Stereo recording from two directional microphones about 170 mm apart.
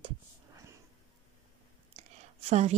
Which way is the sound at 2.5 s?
40° right (ahead or behind).